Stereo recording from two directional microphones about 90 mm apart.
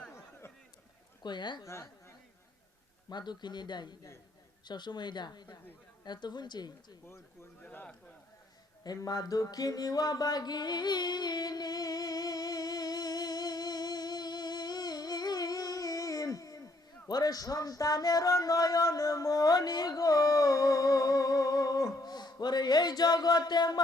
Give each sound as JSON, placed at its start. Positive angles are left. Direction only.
{"t": 0.1, "sound": "a sound", "side_deg": 25}
{"t": 1.2, "sound": "speech", "side_deg": 55}
{"t": 1.6, "sound": "a woman's voice", "side_deg": 30}
{"t": 3.1, "sound": "speech", "side_deg": 55}
{"t": 7.6, "sound": "a man's voice", "side_deg": 20}
{"t": 8.8, "sound": "music", "side_deg": 45}